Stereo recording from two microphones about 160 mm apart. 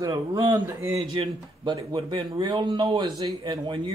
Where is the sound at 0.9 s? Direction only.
35° right (ahead or behind).